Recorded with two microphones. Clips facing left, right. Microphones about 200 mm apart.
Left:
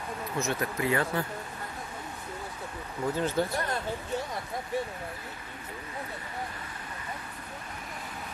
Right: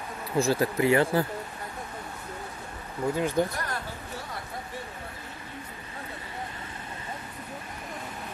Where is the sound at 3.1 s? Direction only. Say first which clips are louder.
Right 3 dB; 15° right (ahead or behind).